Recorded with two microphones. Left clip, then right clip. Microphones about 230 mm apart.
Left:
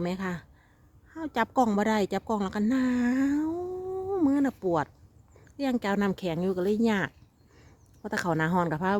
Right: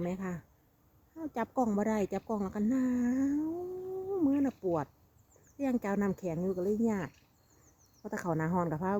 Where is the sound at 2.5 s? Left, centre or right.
Centre.